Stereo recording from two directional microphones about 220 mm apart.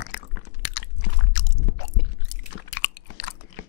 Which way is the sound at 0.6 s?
55° left (ahead or behind).